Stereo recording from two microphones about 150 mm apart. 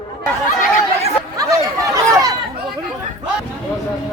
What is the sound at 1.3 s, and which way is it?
Chatter, 20° right (ahead or behind).